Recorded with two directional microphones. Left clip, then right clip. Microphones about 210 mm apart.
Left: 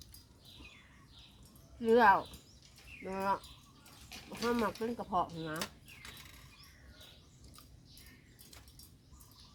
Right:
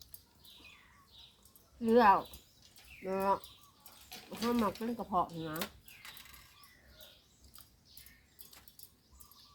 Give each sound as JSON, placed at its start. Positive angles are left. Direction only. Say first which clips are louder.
{"t": 1.8, "sound": "speech", "louder": "even", "side_deg": 20}
{"t": 4.1, "sound": "a sound", "louder": "even", "side_deg": -25}
{"t": 4.4, "sound": "speech", "louder": "even", "side_deg": 20}